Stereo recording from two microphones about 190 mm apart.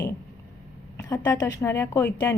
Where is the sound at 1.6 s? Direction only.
15° left (ahead or behind).